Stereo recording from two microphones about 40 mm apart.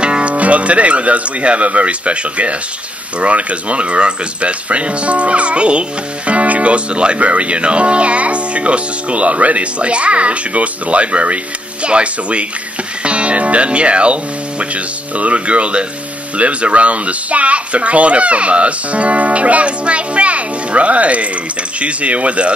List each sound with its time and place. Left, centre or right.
0.0 s speech: right